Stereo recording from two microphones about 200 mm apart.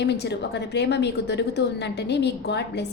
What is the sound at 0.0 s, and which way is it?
A woman's voice, 60° left (ahead or behind).